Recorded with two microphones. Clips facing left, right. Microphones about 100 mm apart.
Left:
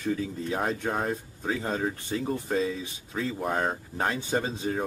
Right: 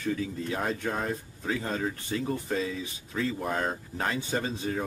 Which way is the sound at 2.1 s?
25° left (ahead or behind).